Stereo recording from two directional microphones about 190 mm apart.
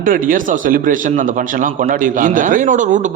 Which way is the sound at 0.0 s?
45° right (ahead or behind).